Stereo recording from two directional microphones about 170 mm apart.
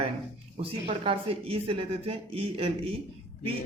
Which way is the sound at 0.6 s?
30° right (ahead or behind).